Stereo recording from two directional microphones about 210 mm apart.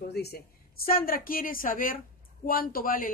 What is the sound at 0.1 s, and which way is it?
Speech, 50° left (ahead or behind).